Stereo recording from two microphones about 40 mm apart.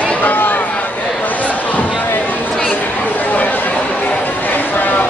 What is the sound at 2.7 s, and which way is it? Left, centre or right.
Chatter, left.